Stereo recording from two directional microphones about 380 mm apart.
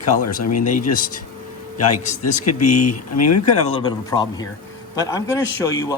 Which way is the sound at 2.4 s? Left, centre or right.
Left.